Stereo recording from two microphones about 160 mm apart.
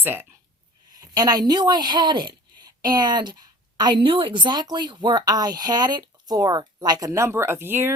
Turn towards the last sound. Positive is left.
turn(degrees=-15)  # may be behind; listen again after turning